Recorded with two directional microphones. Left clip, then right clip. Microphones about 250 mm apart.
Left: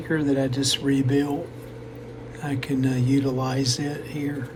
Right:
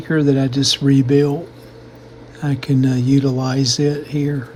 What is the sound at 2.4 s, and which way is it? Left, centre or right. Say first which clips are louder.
Speech: right 7 dB; centre.